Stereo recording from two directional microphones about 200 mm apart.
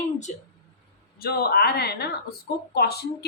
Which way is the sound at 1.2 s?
50° left (ahead or behind).